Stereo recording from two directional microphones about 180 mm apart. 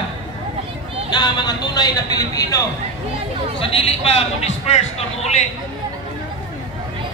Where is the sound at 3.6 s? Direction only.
30° left (ahead or behind).